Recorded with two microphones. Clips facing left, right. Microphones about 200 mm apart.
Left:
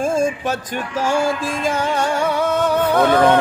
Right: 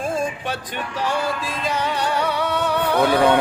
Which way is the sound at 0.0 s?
45° left (ahead or behind).